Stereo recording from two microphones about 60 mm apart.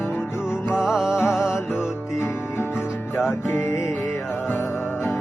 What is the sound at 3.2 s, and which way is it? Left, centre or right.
Music, left.